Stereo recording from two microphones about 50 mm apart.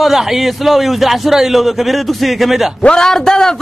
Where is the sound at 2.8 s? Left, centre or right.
Centre.